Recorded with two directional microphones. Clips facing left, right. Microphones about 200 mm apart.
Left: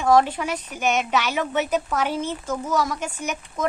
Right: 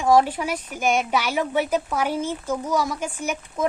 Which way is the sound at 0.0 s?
10° right (ahead or behind).